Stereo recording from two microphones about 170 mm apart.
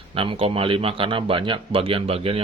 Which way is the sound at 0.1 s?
30° right (ahead or behind).